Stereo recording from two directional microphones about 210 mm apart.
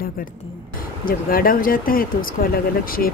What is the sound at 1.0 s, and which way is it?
Speech, 45° left (ahead or behind).